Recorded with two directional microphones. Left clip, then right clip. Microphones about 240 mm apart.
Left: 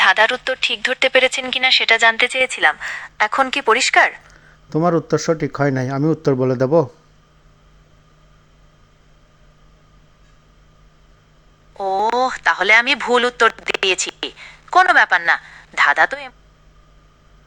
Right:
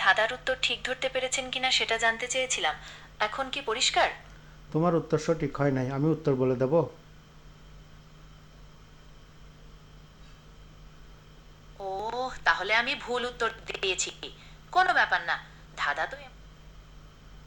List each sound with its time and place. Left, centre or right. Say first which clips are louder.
0.0 s speech: left 11 dB; left
11.8 s speech: left 15 dB; left